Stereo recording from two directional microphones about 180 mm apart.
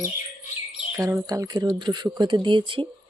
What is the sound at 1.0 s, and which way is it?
Speech, 20° right (ahead or behind).